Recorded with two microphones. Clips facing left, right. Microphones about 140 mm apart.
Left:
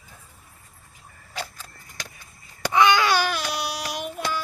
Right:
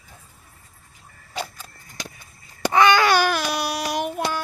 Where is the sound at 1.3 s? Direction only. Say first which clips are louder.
Right 3 dB; 15° right (ahead or behind).